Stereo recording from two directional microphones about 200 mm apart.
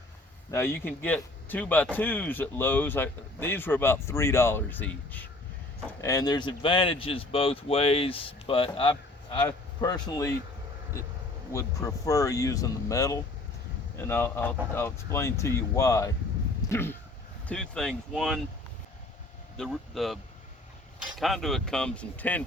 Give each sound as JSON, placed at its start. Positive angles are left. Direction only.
{"t": 0.5, "sound": "a man's voice", "side_deg": 10}
{"t": 11.5, "sound": "a man's voice", "side_deg": 15}
{"t": 19.5, "sound": "speech", "side_deg": 0}
{"t": 21.2, "sound": "speech", "side_deg": 0}